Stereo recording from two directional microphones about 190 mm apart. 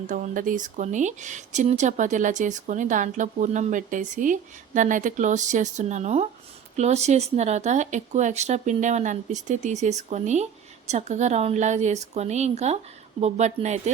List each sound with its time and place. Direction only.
0.1 s speech: 45° right (ahead or behind)